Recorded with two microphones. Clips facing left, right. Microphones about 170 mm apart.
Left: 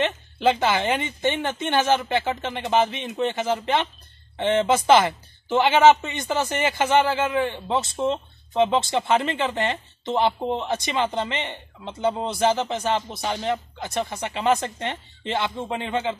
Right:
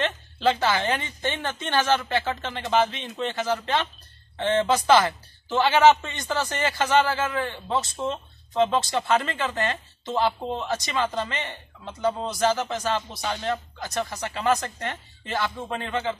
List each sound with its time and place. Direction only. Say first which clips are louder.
0.0 s a woman's voice: left 2 dB; 15° left (ahead or behind)